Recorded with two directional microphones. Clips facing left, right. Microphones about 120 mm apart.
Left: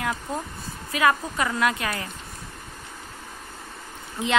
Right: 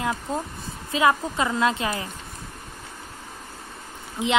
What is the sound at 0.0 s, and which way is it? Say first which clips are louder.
Speech: right 2 dB; 20° right (ahead or behind).